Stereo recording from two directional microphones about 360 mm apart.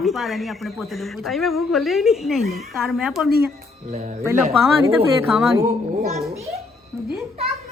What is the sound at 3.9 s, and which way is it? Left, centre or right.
Speech, right.